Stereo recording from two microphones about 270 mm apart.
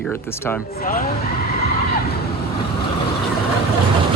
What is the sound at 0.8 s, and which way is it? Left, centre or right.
Speech, left.